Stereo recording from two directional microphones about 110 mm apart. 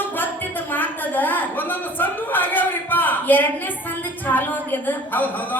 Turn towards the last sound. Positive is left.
turn(degrees=15)  # may be behind; listen again after turning